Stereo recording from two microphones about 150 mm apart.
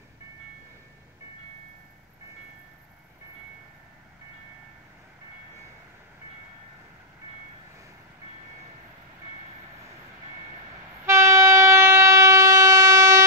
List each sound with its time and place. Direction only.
11.1 s train: 20° right (ahead or behind)